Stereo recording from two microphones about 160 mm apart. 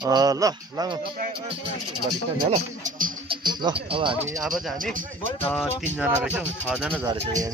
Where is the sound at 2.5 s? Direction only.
50° right (ahead or behind).